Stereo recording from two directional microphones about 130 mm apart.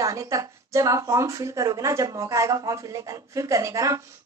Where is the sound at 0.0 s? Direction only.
25° right (ahead or behind).